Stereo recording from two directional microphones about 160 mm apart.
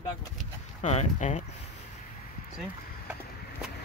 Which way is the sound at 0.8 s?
45° left (ahead or behind).